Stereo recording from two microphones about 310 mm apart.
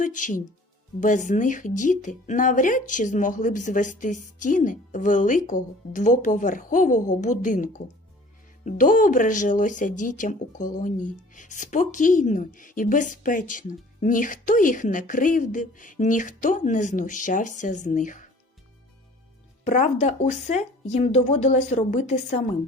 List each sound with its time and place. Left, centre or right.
0.0 s speech: left
19.6 s speech: left